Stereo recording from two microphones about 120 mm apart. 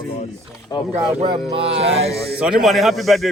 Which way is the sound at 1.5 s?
50° right (ahead or behind).